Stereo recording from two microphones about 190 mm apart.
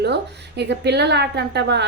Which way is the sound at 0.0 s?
60° right (ahead or behind).